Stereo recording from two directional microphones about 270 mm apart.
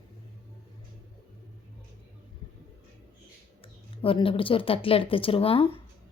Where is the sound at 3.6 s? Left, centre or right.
Centre.